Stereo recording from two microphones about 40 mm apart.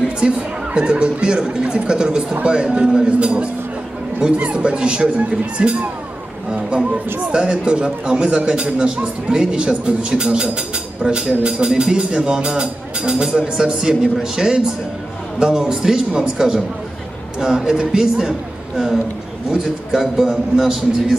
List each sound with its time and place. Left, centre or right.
0.2 s a man's voice: right
7.2 s a man's voice: right
19.5 s a man's voice: centre